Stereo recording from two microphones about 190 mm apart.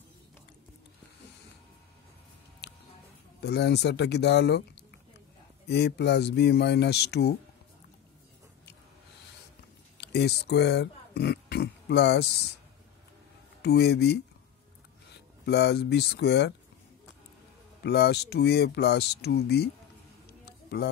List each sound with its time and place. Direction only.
2.6 s a sound: 60° left (ahead or behind)
3.4 s speech: 60° left (ahead or behind)
5.7 s speech: 60° left (ahead or behind)
9.9 s speech: 60° left (ahead or behind)
13.6 s speech: 60° left (ahead or behind)
17.8 s speech: 60° left (ahead or behind)
20.4 s a sound: 60° left (ahead or behind)